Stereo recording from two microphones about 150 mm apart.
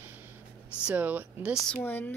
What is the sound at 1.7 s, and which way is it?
Speech, 10° left (ahead or behind).